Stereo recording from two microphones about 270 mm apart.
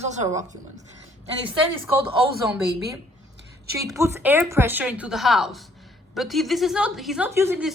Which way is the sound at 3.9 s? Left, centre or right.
Centre.